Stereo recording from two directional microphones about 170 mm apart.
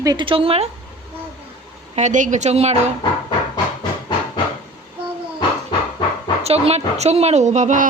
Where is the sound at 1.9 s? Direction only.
45° right (ahead or behind).